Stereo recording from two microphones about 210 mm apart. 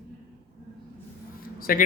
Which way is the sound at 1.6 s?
45° left (ahead or behind).